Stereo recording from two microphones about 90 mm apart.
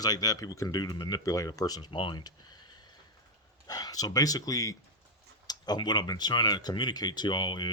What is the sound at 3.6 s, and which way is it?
Speech, 45° left (ahead or behind).